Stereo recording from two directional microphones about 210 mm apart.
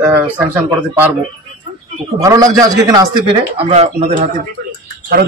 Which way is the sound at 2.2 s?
15° right (ahead or behind).